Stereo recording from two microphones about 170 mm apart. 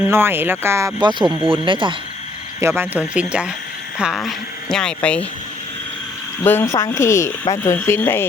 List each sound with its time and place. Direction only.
0.1 s speech: 15° right (ahead or behind); by 2.0 s 30° right (ahead or behind)
2.6 s speech: 15° right (ahead or behind); by 5.2 s 5° left (ahead or behind)
6.4 s speech: 15° left (ahead or behind)